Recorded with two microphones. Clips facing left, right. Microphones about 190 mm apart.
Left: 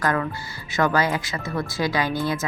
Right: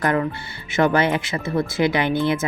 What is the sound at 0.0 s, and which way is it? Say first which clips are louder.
Speech: right 3 dB; 20° right (ahead or behind).